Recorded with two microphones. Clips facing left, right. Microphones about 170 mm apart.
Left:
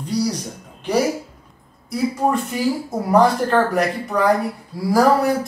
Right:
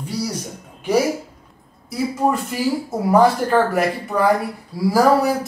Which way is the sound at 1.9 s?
Centre (ahead or behind).